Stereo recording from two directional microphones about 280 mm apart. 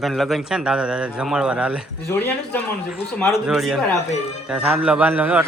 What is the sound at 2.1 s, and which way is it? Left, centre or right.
A man's voice, centre.